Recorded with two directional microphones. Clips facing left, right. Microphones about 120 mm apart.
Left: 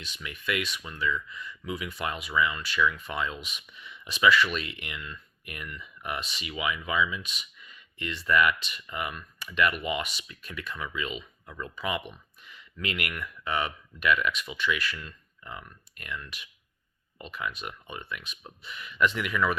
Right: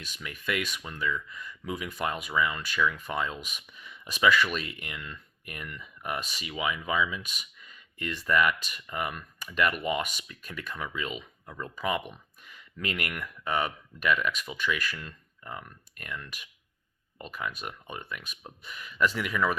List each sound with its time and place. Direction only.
0.0 s speech: 45° right (ahead or behind)